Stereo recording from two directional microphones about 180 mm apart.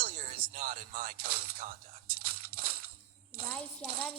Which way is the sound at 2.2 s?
55° right (ahead or behind).